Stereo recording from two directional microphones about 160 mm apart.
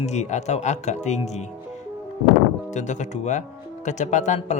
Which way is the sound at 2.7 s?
50° left (ahead or behind).